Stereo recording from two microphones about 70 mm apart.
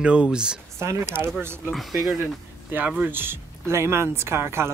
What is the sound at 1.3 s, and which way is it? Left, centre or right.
Speech, right.